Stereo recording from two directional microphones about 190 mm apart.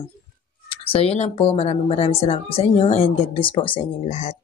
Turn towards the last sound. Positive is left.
turn(degrees=35)  # may be behind; listen again after turning